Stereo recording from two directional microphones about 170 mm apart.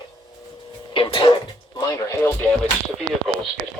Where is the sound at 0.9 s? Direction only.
30° left (ahead or behind).